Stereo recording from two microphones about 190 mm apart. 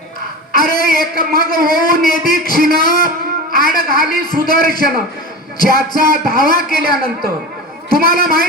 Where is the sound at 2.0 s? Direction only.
50° right (ahead or behind).